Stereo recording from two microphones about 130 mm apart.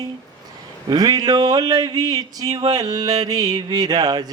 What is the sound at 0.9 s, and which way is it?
Speech, 30° right (ahead or behind).